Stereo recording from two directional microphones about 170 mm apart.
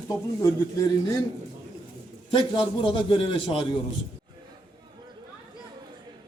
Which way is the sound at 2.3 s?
30° left (ahead or behind).